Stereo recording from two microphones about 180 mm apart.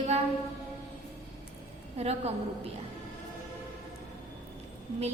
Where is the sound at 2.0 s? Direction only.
35° right (ahead or behind).